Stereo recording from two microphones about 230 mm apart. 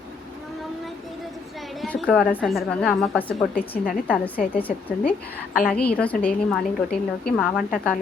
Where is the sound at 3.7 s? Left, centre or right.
Left.